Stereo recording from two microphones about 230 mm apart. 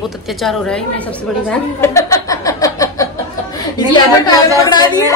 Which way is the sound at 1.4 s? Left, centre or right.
Centre.